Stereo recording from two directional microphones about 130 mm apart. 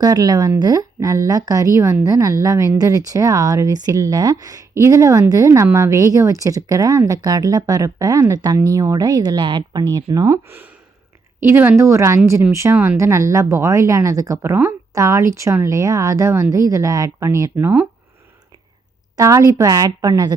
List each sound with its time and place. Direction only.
0.0 s speech: 30° right (ahead or behind)
9.9 s speech: 25° right (ahead or behind); by 13.0 s 10° right (ahead or behind)
13.0 s speech: 25° right (ahead or behind)
19.1 s speech: 25° right (ahead or behind)